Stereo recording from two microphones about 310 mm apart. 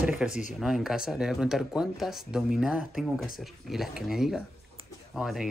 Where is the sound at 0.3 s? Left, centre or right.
Left.